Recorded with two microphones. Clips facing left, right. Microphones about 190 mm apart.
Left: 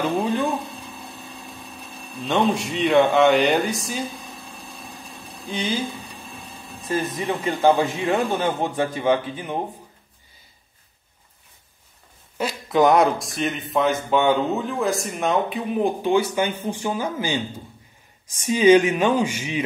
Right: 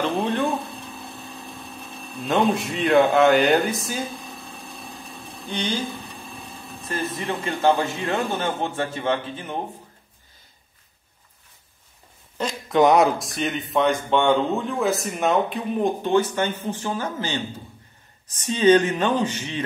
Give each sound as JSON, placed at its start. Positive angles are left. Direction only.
{"t": 0.0, "sound": "a sound", "side_deg": 5}
{"t": 2.0, "sound": "speech", "side_deg": 0}
{"t": 5.4, "sound": "speech", "side_deg": 0}
{"t": 6.9, "sound": "speech", "side_deg": 15}
{"t": 12.4, "sound": "speech", "side_deg": 5}